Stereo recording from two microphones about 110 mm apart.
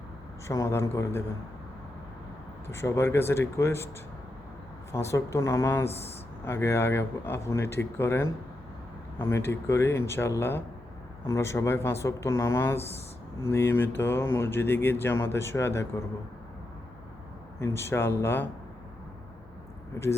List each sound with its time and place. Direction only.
0.4 s speech: 30° left (ahead or behind)
2.6 s speech: 25° left (ahead or behind)
4.9 s speech: 25° left (ahead or behind)
17.6 s speech: 25° left (ahead or behind)